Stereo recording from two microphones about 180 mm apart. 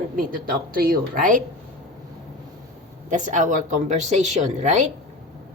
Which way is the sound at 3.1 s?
45° right (ahead or behind).